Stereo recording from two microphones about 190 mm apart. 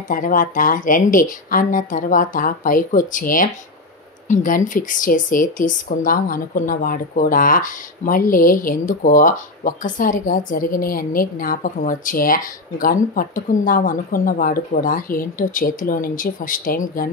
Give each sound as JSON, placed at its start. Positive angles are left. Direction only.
{"t": 0.1, "sound": "speech", "side_deg": 45}